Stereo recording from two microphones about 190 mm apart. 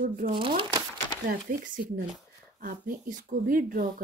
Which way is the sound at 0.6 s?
25° right (ahead or behind).